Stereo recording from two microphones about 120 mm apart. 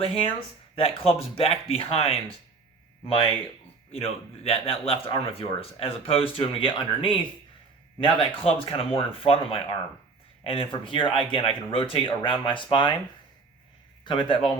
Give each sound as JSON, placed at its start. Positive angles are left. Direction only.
{"t": 0.0, "sound": "speech", "side_deg": 50}
{"t": 3.9, "sound": "speech", "side_deg": 55}
{"t": 14.0, "sound": "speech", "side_deg": 45}